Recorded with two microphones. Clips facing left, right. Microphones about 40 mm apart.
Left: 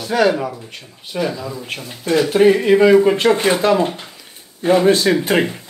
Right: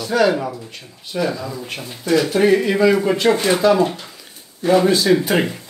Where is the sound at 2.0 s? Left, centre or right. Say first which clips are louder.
Left 2 dB; left.